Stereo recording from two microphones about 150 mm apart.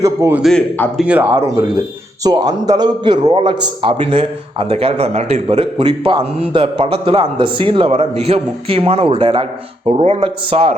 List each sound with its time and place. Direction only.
0.0 s a man's voice: 20° right (ahead or behind)
0.3 s a man's voice: centre (ahead or behind)
1.3 s a man's voice: 20° right (ahead or behind); by 10.8 s 40° right (ahead or behind)